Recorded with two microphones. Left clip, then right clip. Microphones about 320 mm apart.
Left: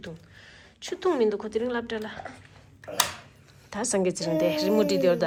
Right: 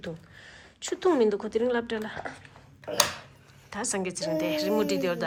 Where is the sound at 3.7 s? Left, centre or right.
Centre.